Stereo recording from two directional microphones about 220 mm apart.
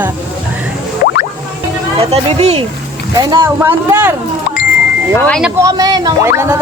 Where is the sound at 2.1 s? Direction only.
25° right (ahead or behind); by 4.1 s 10° right (ahead or behind).